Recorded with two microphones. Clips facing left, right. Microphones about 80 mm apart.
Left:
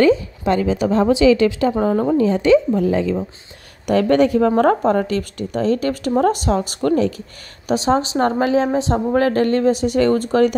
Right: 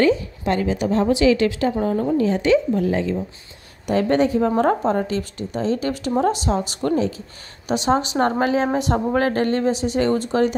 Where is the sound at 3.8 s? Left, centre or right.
Left.